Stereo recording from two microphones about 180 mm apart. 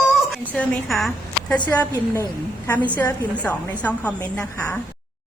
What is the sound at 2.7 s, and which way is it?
A woman's voice, 10° left (ahead or behind).